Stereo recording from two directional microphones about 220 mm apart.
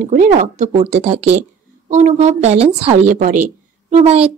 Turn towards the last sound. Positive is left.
turn(degrees=-30)  # may be behind; listen again after turning